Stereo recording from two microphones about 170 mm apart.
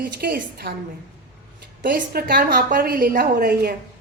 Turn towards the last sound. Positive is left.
turn(degrees=-60)  # may be behind; listen again after turning